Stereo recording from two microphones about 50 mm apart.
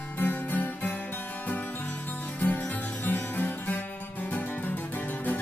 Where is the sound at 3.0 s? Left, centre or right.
Left.